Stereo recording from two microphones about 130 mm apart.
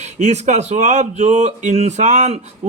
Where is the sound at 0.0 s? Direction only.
60° right (ahead or behind).